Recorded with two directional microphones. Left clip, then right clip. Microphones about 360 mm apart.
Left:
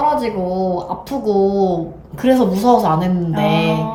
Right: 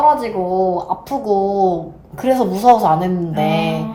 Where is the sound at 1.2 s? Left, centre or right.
Centre.